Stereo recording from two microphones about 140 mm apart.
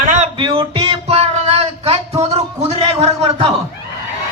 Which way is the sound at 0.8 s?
45° right (ahead or behind).